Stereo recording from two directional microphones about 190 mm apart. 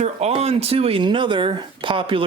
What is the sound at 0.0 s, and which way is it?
Speech, 35° right (ahead or behind).